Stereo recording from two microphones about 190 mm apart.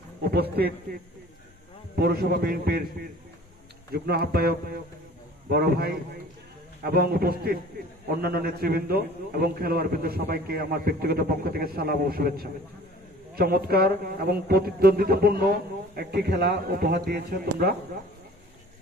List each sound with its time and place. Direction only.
0.2 s a man's voice: 55° right (ahead or behind)
2.0 s a man's voice: 55° right (ahead or behind)